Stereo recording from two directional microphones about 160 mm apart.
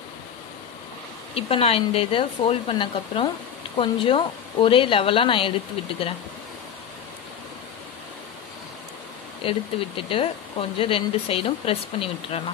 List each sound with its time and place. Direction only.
1.3 s speech: 35° left (ahead or behind)
9.4 s speech: 35° left (ahead or behind)